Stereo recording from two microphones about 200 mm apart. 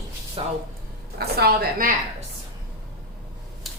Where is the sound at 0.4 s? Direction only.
25° right (ahead or behind).